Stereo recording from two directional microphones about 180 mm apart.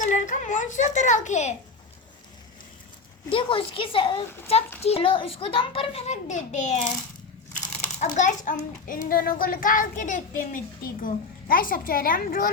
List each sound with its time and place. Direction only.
0.0 s a sound: 45° left (ahead or behind)
3.2 s a woman's voice: 30° left (ahead or behind)
7.9 s a child's voice: 40° left (ahead or behind)